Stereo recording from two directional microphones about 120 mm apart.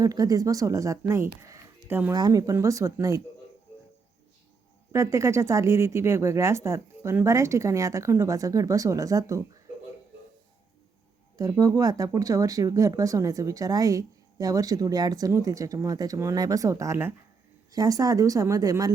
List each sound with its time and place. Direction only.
0.0 s speech: 30° right (ahead or behind)
2.1 s speech: 30° right (ahead or behind)
4.9 s speech: 25° right (ahead or behind)
11.3 s speech: 30° right (ahead or behind)